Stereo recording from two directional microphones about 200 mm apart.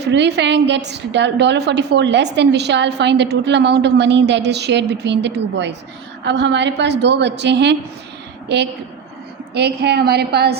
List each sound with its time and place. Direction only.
0.0 s a woman's voice: 60° right (ahead or behind)